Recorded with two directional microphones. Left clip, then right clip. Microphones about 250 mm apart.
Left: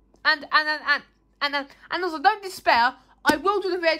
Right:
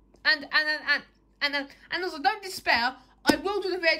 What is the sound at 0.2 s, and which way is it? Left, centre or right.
A woman's voice, centre.